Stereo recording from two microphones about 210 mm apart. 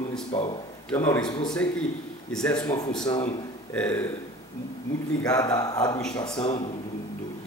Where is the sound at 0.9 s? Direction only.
10° left (ahead or behind).